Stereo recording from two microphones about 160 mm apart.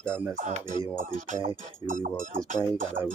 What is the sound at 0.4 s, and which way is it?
Speech, 50° right (ahead or behind).